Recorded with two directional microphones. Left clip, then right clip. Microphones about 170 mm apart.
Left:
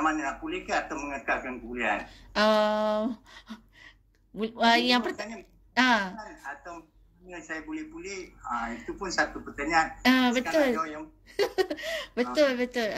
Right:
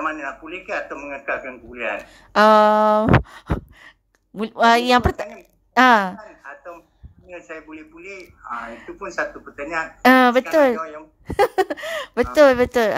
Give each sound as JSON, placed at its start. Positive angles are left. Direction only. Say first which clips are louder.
{"t": 0.0, "sound": "a man's voice", "louder": "right 2 dB", "side_deg": 40}
{"t": 2.3, "sound": "a woman's voice", "louder": "right 11 dB", "side_deg": -55}
{"t": 6.1, "sound": "a man's voice", "louder": "right 2 dB", "side_deg": 40}
{"t": 10.0, "sound": "speech", "louder": "right 11 dB", "side_deg": -55}
{"t": 10.8, "sound": "a man's voice", "louder": "right 2 dB", "side_deg": 40}
{"t": 11.3, "sound": "speech", "louder": "right 9 dB", "side_deg": -60}